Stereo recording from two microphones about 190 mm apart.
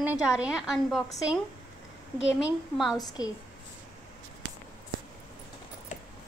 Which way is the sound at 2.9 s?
20° left (ahead or behind).